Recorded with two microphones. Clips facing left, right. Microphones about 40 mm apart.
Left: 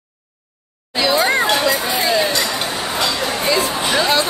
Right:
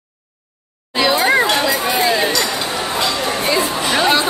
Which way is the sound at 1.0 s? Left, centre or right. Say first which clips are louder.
Right 2 dB; centre.